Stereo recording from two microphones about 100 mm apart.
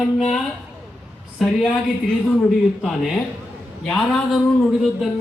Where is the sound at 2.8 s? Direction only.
Centre (ahead or behind).